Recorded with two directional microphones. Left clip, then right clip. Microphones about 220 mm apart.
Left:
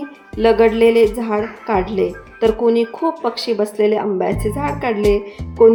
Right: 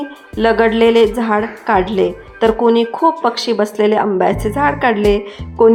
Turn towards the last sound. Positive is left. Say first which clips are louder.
# even
turn(degrees=-5)  # may be behind; listen again after turning